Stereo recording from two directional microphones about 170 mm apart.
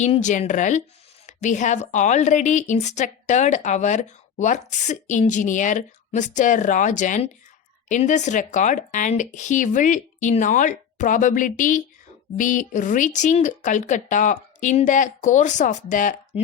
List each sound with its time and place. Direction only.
0.0 s a woman's voice: 45° left (ahead or behind)